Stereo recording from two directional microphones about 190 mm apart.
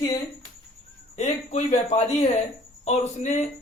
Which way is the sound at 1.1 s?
35° left (ahead or behind).